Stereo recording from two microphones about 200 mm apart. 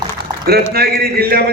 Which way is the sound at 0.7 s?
50° right (ahead or behind).